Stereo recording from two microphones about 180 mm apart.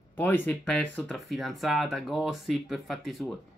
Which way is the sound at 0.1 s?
10° left (ahead or behind).